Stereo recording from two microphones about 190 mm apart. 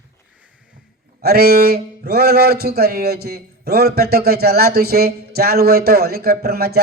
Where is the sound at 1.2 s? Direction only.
55° right (ahead or behind).